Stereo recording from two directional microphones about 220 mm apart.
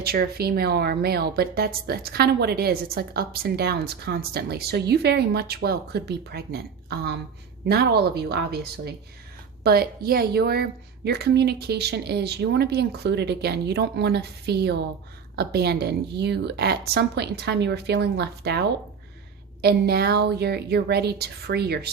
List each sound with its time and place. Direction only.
0.0 s a woman's voice: 45° right (ahead or behind)
19.6 s a woman's voice: 45° right (ahead or behind)